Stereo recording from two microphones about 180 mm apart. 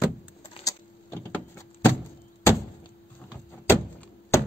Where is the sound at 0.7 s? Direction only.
15° left (ahead or behind).